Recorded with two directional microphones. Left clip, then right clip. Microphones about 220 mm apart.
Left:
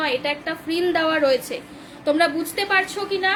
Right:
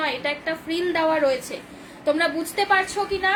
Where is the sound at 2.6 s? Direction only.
20° left (ahead or behind).